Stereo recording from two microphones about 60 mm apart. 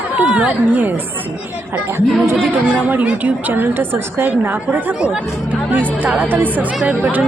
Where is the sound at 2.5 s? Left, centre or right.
Right.